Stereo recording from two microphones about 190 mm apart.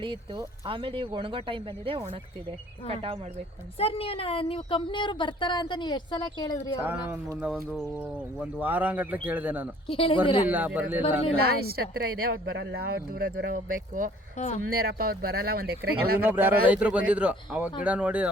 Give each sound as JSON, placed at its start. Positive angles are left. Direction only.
{"t": 0.0, "sound": "speech", "side_deg": -25}
{"t": 3.8, "sound": "a woman's voice", "side_deg": 30}
{"t": 6.7, "sound": "a man's voice", "side_deg": -10}
{"t": 9.8, "sound": "a woman's voice", "side_deg": 30}
{"t": 10.5, "sound": "a man's voice", "side_deg": -10}
{"t": 11.4, "sound": "speech", "side_deg": -55}
{"t": 14.3, "sound": "speech", "side_deg": 35}
{"t": 14.7, "sound": "speech", "side_deg": -50}
{"t": 16.2, "sound": "a man's voice", "side_deg": -10}